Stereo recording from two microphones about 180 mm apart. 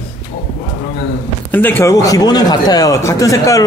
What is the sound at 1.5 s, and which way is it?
A man's voice, 10° left (ahead or behind).